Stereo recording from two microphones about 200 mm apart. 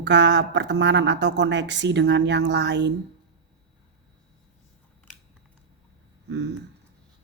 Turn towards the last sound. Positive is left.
turn(degrees=-60)  # may be behind; listen again after turning